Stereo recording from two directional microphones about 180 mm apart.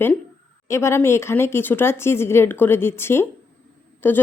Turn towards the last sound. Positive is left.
turn(degrees=10)  # may be behind; listen again after turning